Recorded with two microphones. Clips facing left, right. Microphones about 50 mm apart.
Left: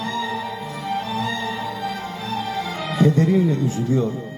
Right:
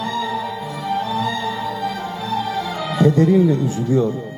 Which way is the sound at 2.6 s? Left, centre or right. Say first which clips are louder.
Right 3 dB; centre.